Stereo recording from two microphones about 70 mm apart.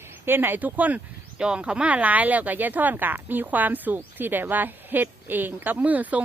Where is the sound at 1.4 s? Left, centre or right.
Centre.